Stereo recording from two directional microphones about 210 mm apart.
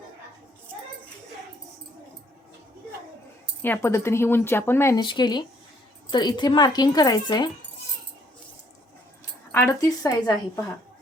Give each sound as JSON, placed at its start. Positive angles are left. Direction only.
{"t": 3.6, "sound": "a woman's voice", "side_deg": 10}
{"t": 9.5, "sound": "speech", "side_deg": 15}